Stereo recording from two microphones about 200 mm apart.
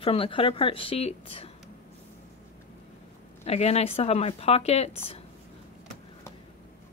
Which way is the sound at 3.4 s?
30° left (ahead or behind).